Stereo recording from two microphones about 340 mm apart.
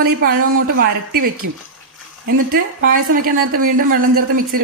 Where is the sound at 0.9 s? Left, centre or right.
Right.